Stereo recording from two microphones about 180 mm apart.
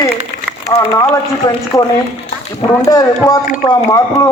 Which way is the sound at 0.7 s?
15° left (ahead or behind).